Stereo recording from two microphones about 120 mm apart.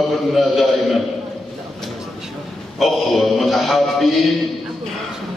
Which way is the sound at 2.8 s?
Centre (ahead or behind).